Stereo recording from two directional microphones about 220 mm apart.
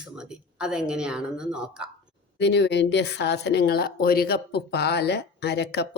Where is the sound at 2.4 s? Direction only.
50° left (ahead or behind).